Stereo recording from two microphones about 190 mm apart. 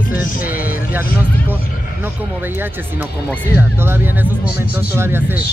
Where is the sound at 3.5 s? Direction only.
10° right (ahead or behind).